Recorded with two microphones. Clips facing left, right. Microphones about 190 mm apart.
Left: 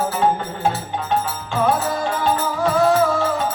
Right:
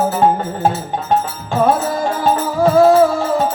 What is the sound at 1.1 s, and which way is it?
Music, 45° right (ahead or behind).